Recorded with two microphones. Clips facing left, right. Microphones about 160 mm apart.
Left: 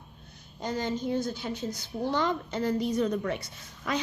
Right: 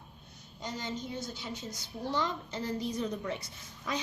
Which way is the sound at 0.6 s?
55° left (ahead or behind).